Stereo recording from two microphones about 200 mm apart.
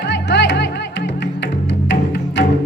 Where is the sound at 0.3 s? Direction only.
60° left (ahead or behind).